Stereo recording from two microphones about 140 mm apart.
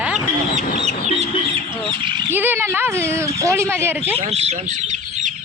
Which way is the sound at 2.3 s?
15° right (ahead or behind).